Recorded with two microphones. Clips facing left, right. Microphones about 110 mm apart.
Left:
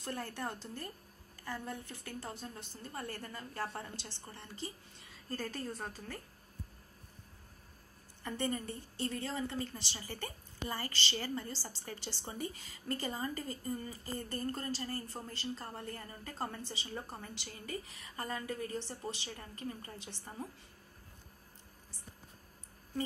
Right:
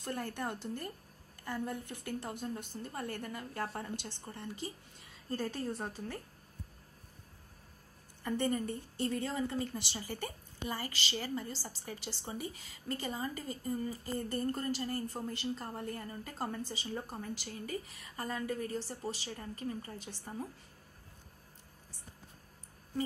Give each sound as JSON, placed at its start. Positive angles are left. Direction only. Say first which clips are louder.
{"t": 0.0, "sound": "a woman's voice", "louder": "right 2 dB", "side_deg": -15}
{"t": 8.2, "sound": "a woman's voice", "louder": "right 4 dB", "side_deg": -10}
{"t": 10.7, "sound": "speech", "louder": "even", "side_deg": -5}
{"t": 14.3, "sound": "a woman's voice", "louder": "right 3 dB", "side_deg": -15}
{"t": 20.1, "sound": "a woman's voice", "louder": "right 2 dB", "side_deg": -5}